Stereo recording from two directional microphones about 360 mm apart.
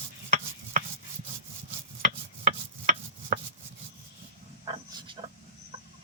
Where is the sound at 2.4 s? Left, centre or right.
Right.